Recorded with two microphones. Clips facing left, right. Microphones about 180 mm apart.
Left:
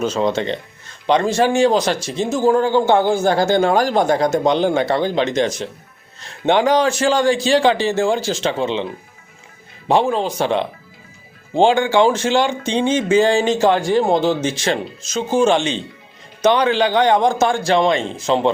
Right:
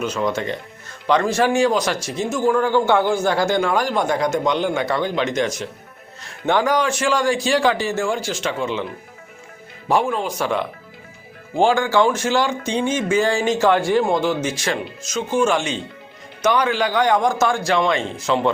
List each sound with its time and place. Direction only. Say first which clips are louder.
0.0 s a man's voice: left 4 dB; 30° left (ahead or behind)
9.9 s a man's voice: left 3 dB; 25° left (ahead or behind)